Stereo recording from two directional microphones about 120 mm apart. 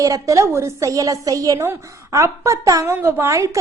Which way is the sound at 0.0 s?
30° right (ahead or behind).